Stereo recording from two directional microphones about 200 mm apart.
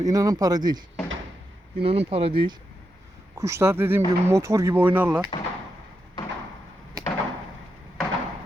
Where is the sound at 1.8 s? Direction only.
30° right (ahead or behind).